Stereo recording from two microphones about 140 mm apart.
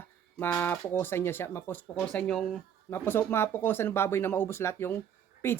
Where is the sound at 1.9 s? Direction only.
5° left (ahead or behind).